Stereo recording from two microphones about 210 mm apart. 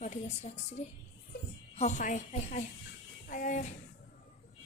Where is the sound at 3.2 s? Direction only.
40° left (ahead or behind).